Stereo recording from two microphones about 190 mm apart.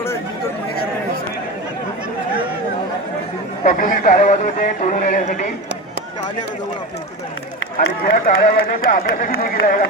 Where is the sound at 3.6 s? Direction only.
45° left (ahead or behind).